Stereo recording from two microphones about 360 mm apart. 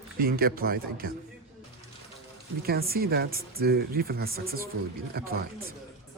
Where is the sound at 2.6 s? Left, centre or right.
Right.